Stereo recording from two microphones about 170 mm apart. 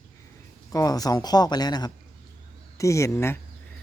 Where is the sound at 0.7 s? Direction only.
20° left (ahead or behind).